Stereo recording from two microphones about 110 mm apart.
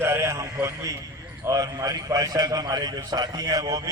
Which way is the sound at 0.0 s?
25° right (ahead or behind).